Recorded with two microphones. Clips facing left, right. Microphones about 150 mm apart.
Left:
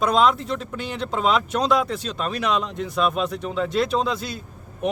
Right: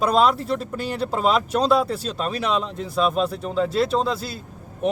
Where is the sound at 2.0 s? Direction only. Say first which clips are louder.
Right 1 dB; 35° right (ahead or behind).